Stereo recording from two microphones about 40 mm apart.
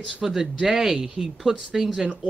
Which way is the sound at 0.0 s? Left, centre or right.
Centre.